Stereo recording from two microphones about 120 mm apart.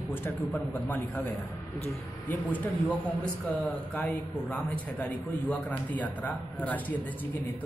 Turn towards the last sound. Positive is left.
turn(degrees=15)  # may be behind; listen again after turning